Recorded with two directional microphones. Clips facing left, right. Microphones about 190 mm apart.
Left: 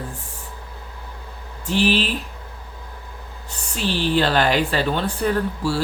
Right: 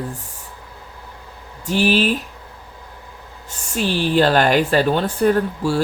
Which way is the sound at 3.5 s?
45° right (ahead or behind).